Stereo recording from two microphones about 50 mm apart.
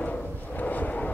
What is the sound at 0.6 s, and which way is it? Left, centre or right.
Vehicle, left.